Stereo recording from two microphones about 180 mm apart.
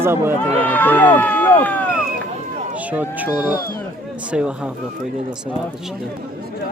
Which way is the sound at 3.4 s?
55° left (ahead or behind).